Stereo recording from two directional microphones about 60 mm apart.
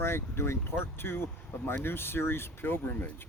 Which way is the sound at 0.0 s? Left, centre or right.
Left.